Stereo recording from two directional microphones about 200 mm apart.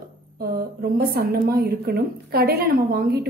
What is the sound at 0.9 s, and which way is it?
A woman's voice, 50° right (ahead or behind).